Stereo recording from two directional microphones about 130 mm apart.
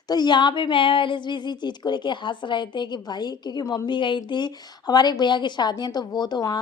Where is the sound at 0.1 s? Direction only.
35° left (ahead or behind).